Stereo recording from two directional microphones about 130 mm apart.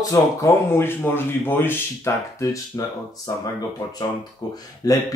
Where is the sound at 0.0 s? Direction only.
25° left (ahead or behind).